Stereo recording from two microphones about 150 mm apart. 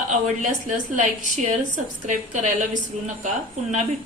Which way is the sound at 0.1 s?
55° right (ahead or behind).